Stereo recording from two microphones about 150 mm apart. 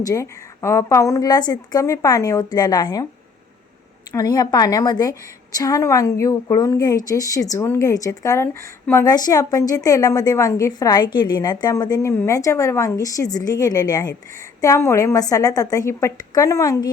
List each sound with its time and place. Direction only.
0.0 s a woman's voice: 20° left (ahead or behind)
4.1 s a woman's voice: 25° left (ahead or behind)